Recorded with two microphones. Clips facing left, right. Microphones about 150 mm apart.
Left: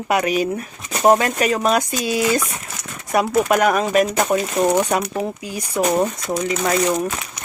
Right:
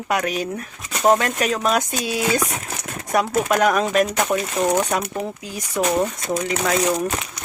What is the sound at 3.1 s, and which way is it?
Speech, 5° left (ahead or behind).